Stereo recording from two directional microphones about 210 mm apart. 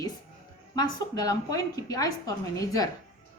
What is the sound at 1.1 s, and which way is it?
A woman's voice, 15° left (ahead or behind).